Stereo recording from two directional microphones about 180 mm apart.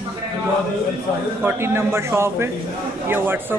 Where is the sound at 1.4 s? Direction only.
15° right (ahead or behind).